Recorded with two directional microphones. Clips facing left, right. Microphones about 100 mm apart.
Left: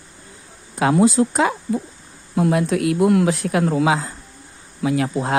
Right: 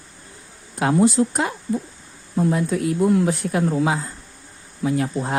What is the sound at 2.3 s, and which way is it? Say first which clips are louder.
A woman's voice: left 2 dB; 75° left (ahead or behind).